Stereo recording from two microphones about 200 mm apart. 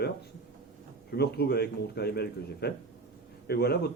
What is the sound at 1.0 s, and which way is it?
A man's voice, 55° left (ahead or behind).